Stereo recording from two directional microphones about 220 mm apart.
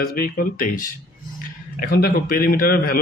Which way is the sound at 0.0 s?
40° left (ahead or behind).